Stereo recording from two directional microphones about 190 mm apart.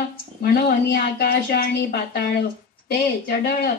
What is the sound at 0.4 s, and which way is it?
A woman's voice, 50° left (ahead or behind).